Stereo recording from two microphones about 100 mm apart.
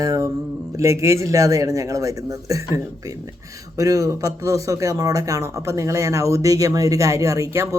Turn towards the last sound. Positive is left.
turn(degrees=-30)  # may be behind; listen again after turning